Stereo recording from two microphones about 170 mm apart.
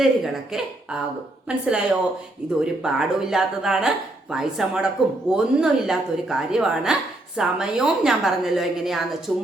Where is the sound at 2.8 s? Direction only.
Centre (ahead or behind).